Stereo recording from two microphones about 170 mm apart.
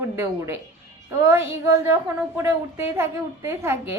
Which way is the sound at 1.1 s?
15° right (ahead or behind).